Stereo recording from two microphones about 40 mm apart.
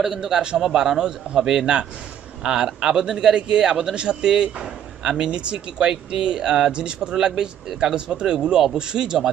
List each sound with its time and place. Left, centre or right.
0.0 s a man's voice: centre